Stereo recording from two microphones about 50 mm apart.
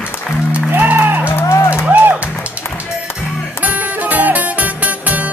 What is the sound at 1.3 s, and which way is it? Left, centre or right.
Music, left.